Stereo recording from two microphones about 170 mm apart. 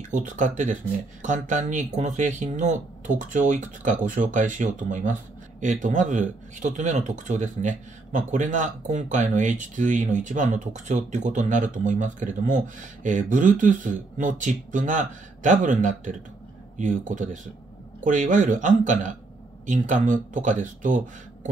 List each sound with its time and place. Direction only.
0.1 s speech: 45° right (ahead or behind)